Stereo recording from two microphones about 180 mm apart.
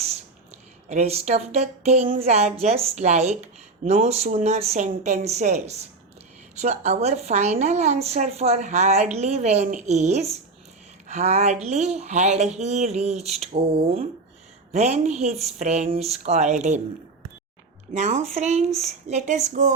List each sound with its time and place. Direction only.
0.9 s speech: 35° right (ahead or behind)
17.9 s speech: 40° right (ahead or behind)